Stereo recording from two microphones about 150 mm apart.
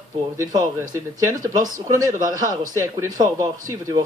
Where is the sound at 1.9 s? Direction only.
25° right (ahead or behind).